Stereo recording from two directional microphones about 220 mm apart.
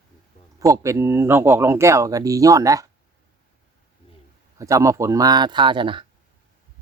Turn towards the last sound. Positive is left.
turn(degrees=-20)  # may be behind; listen again after turning